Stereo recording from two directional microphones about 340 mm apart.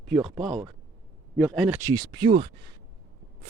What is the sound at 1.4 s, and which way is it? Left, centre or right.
Speech, centre.